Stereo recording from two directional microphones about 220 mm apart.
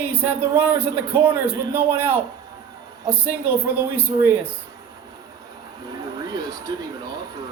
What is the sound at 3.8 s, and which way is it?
Speech, 10° right (ahead or behind).